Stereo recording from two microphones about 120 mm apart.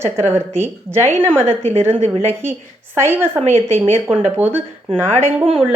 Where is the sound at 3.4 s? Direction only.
60° right (ahead or behind).